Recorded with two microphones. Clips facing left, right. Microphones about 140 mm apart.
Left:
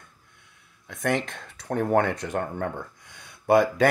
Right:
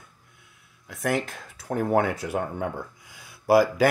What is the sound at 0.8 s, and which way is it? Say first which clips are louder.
Speech: even; 5° right (ahead or behind).